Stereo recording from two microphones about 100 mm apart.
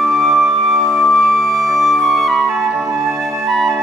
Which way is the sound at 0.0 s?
Centre (ahead or behind).